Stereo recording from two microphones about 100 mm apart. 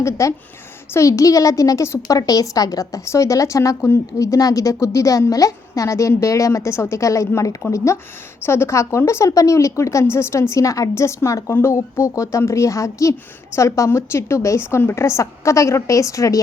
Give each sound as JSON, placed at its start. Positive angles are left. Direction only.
{"t": 0.0, "sound": "a woman's voice", "side_deg": 30}